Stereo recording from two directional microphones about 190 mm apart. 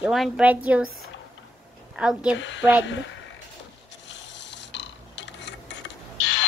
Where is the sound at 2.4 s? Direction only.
75° left (ahead or behind).